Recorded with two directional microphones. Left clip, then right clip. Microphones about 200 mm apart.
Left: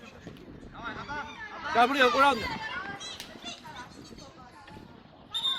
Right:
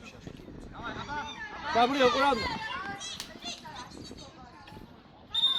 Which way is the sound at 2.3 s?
35° right (ahead or behind).